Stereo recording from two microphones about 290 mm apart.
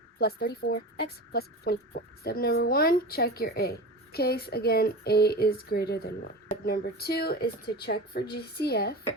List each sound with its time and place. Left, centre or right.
0.2 s speech: left